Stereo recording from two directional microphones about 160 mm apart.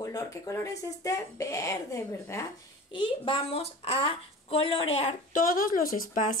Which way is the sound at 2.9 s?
30° left (ahead or behind).